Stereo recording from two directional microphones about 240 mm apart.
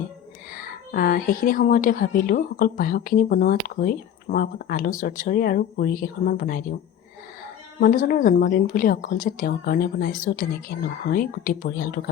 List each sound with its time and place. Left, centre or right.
0.5 s a woman's voice: left
7.8 s a woman's voice: left